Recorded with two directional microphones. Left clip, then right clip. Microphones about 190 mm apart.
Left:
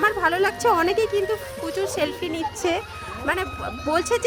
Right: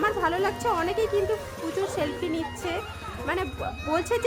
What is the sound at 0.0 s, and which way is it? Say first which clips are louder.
A woman's voice: left 5 dB; 30° left (ahead or behind).